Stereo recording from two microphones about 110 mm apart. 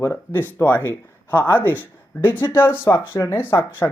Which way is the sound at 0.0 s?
20° left (ahead or behind).